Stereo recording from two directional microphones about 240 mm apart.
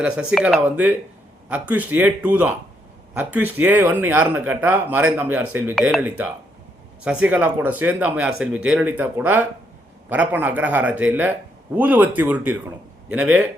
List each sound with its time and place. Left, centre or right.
0.0 s speech: centre